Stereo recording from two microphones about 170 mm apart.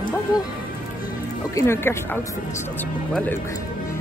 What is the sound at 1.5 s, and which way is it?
Speech, 15° left (ahead or behind).